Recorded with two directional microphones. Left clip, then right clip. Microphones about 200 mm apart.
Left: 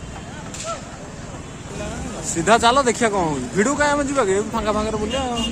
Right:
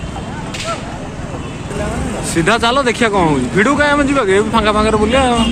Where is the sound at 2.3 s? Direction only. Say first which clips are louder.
Right 2 dB; 10° left (ahead or behind).